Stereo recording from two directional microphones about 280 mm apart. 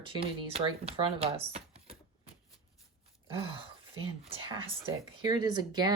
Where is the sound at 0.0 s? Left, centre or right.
Centre.